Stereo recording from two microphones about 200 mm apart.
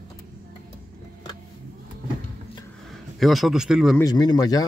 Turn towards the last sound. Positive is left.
turn(degrees=20)  # may be behind; listen again after turning